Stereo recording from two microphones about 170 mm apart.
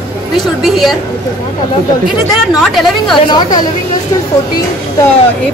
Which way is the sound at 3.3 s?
25° left (ahead or behind).